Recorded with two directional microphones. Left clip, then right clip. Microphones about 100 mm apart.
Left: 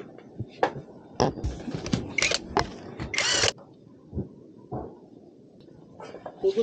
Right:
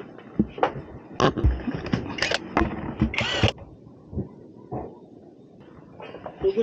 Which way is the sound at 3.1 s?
35° left (ahead or behind).